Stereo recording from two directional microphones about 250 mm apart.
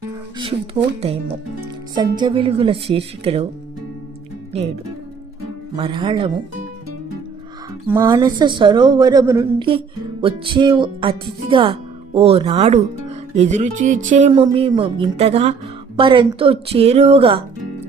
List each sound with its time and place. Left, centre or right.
0.3 s speech: right
2.0 s speech: centre
4.5 s speech: right
5.7 s speech: centre
7.9 s speech: centre